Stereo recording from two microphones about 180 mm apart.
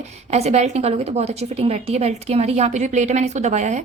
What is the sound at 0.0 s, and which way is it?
A woman's voice, 35° right (ahead or behind).